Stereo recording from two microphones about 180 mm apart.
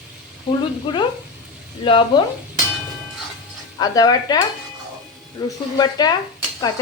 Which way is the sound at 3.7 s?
20° left (ahead or behind).